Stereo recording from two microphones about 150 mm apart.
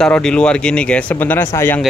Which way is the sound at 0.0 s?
5° left (ahead or behind).